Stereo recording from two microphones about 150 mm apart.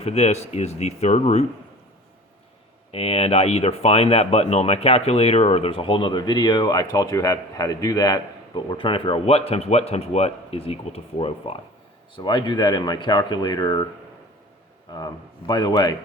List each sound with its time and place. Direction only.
0.0 s speech: 45° left (ahead or behind)
2.9 s speech: 40° left (ahead or behind)
14.9 s speech: 25° left (ahead or behind)